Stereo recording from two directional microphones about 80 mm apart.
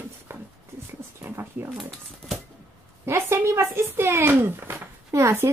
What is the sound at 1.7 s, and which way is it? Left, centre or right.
Speech, centre.